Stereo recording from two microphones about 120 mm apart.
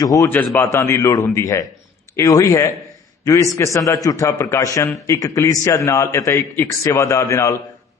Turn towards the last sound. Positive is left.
turn(degrees=25)  # may be behind; listen again after turning